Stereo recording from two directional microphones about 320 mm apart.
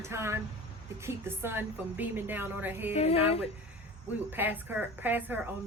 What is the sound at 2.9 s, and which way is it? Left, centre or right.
Speech, centre.